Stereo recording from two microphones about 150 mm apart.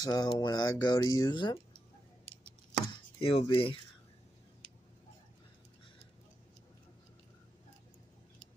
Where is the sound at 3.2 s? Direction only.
35° left (ahead or behind).